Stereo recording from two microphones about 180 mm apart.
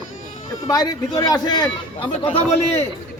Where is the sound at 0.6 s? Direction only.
20° left (ahead or behind).